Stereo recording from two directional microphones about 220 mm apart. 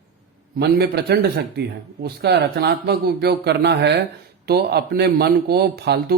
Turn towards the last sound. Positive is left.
turn(degrees=-45)  # may be behind; listen again after turning